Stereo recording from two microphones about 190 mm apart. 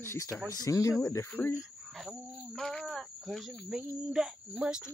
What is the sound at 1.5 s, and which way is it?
Speech, 5° right (ahead or behind).